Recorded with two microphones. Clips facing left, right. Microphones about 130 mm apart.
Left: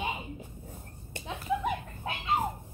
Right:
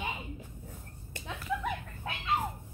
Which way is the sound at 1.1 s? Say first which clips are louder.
Left 4 dB; 25° left (ahead or behind).